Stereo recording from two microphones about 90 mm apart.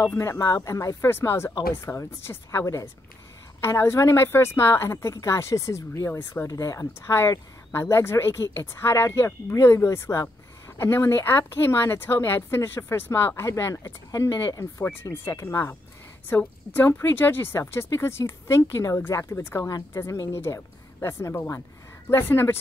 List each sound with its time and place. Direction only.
0.0 s speech: 30° left (ahead or behind)
6.5 s speech: 40° left (ahead or behind)
16.3 s speech: 20° left (ahead or behind)